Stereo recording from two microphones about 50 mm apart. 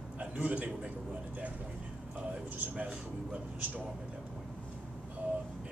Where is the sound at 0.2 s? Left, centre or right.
Right.